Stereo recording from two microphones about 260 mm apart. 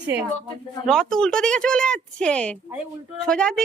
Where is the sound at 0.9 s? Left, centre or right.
Centre.